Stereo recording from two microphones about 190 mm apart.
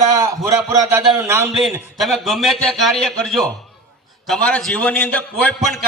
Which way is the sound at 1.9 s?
Centre (ahead or behind).